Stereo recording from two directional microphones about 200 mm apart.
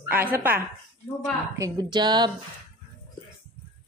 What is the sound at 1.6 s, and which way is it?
Speech, 20° right (ahead or behind).